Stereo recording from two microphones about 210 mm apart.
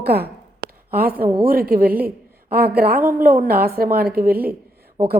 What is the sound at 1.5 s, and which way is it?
A woman's voice, 45° right (ahead or behind).